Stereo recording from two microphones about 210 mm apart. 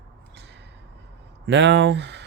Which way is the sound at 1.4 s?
55° right (ahead or behind).